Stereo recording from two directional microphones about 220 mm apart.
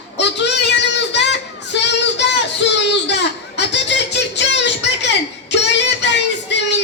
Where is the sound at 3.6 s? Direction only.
50° left (ahead or behind).